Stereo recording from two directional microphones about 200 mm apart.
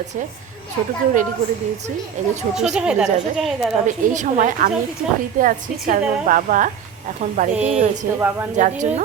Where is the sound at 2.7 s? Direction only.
5° right (ahead or behind).